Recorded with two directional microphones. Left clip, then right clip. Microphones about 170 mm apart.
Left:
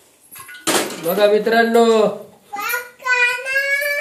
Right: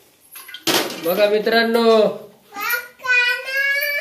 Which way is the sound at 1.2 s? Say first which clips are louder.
Left 2 dB; 25° left (ahead or behind).